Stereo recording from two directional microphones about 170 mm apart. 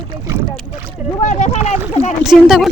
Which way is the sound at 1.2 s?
45° left (ahead or behind).